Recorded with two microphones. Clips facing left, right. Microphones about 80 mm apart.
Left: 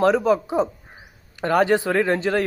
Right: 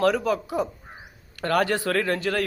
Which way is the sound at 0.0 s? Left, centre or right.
Left.